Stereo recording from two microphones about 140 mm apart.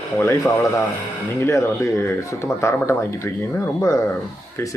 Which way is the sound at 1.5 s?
20° left (ahead or behind).